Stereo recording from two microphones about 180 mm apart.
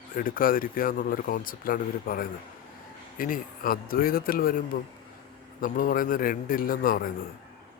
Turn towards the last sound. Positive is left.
turn(degrees=50)  # may be behind; listen again after turning